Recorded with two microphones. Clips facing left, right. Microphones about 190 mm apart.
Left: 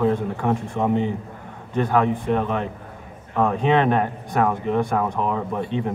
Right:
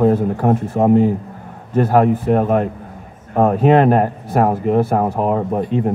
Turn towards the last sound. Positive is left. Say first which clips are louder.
# right 7 dB
turn(degrees=-40)  # may be behind; listen again after turning